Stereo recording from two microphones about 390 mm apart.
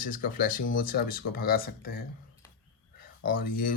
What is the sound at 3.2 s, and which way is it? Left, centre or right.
Speech, left.